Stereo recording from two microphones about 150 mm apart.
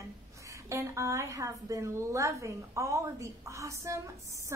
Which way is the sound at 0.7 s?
20° right (ahead or behind).